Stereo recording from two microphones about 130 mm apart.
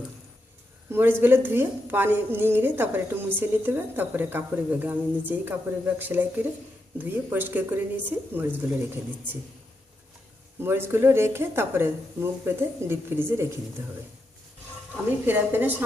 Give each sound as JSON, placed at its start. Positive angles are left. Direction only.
{"t": 0.9, "sound": "speech", "side_deg": -15}
{"t": 10.6, "sound": "speech", "side_deg": -20}
{"t": 15.3, "sound": "speech", "side_deg": -15}